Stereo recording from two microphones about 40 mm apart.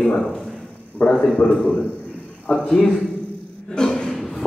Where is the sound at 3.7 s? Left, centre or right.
Centre.